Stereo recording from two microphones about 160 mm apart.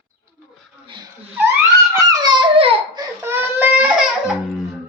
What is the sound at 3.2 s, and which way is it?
Baby cry, 15° right (ahead or behind).